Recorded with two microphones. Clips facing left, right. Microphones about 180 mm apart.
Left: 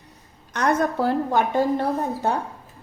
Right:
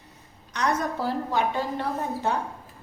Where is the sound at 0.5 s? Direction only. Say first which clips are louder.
Left 5 dB; 55° left (ahead or behind).